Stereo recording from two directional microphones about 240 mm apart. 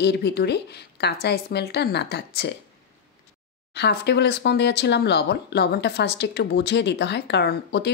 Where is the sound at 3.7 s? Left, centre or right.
Left.